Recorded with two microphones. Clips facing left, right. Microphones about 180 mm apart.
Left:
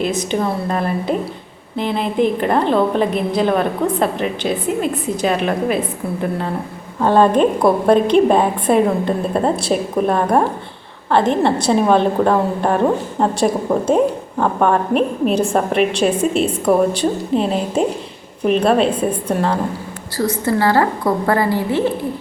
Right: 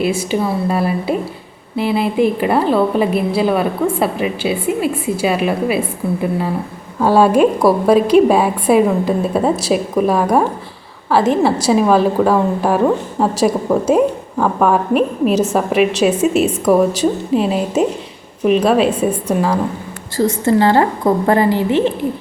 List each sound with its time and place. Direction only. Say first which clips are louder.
0.0 s a woman's voice: right 2 dB; 10° right (ahead or behind)
7.0 s a woman's voice: right 2 dB; 5° right (ahead or behind)
20.4 s a woman's voice: right 3 dB; 20° right (ahead or behind)